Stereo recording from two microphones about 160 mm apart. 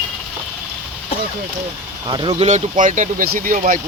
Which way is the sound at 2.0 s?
30° right (ahead or behind).